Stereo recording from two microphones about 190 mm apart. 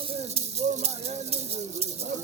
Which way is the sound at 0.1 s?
35° right (ahead or behind).